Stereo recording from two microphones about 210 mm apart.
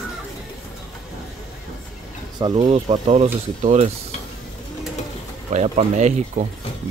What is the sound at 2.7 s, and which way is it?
Speech, 30° right (ahead or behind).